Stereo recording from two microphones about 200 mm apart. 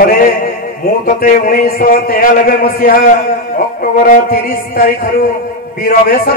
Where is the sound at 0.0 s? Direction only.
45° left (ahead or behind).